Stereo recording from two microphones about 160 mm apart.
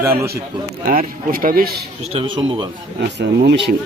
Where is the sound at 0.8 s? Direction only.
60° right (ahead or behind).